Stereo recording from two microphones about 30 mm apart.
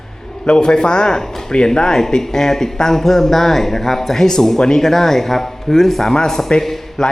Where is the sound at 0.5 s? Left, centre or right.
Left.